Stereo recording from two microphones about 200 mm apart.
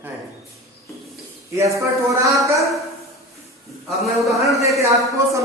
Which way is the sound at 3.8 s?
Centre (ahead or behind).